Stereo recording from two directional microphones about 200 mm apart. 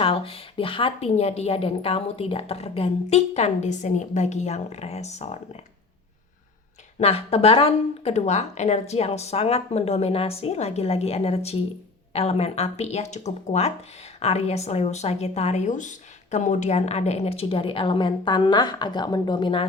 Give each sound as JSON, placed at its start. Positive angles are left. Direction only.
{"t": 0.0, "sound": "speech", "side_deg": 30}
{"t": 7.0, "sound": "speech", "side_deg": 30}